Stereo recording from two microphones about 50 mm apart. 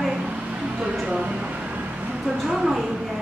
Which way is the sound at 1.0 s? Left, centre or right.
Right.